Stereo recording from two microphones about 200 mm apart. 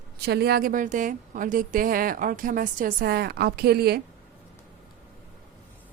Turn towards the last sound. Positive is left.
turn(degrees=-50)  # may be behind; listen again after turning